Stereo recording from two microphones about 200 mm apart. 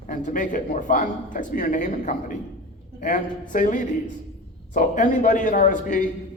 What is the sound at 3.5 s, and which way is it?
A man's voice, 40° left (ahead or behind).